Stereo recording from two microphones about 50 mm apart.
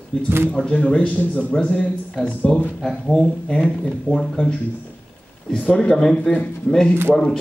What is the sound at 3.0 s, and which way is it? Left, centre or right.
Speech, left.